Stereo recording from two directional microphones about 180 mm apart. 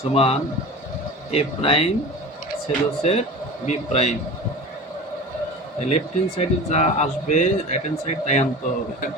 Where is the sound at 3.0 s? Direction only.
35° left (ahead or behind).